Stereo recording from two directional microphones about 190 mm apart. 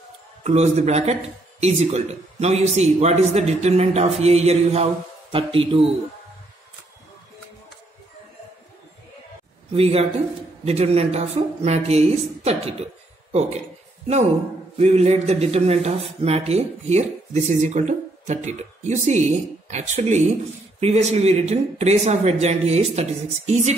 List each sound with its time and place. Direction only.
0.4 s a man's voice: 35° right (ahead or behind)
9.8 s a man's voice: 35° right (ahead or behind)
14.8 s a man's voice: 35° right (ahead or behind)